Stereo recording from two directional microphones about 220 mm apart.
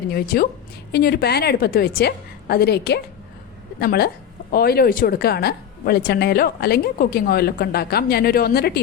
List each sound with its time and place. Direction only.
0.1 s a woman's voice: 45° left (ahead or behind)